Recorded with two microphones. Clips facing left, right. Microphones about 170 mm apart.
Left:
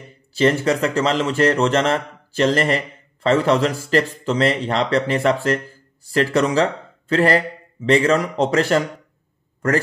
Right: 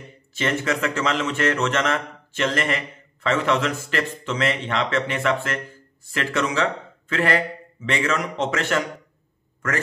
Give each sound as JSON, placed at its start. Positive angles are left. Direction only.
{"t": 0.3, "sound": "a man's voice", "side_deg": 35}